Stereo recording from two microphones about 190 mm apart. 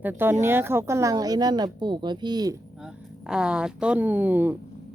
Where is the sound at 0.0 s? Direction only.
10° right (ahead or behind).